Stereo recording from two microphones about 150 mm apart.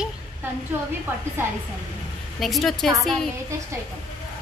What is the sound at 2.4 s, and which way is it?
Speech, centre (ahead or behind).